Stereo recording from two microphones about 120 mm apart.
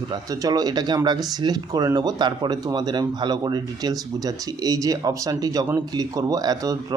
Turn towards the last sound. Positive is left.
turn(degrees=-30)  # may be behind; listen again after turning